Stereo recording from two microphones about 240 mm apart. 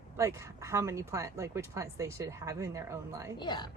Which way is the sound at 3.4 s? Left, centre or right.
Centre.